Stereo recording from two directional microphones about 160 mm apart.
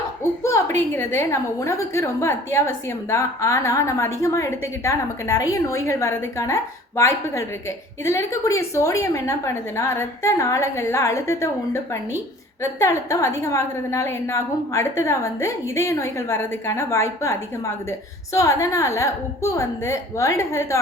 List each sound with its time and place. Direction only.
0.9 s a woman's voice: 15° left (ahead or behind)
12.8 s a woman's voice: 20° left (ahead or behind)
18.3 s a woman's voice: 20° left (ahead or behind)